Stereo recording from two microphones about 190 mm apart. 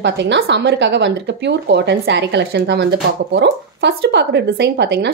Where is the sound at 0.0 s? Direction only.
65° right (ahead or behind).